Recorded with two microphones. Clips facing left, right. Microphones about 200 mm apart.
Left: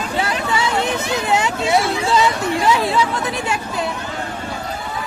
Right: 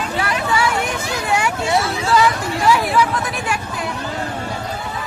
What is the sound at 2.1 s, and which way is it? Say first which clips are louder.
Chatter: right 2 dB; 20° left (ahead or behind).